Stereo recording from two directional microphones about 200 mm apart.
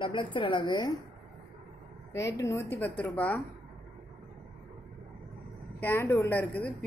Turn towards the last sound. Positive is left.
turn(degrees=10)  # may be behind; listen again after turning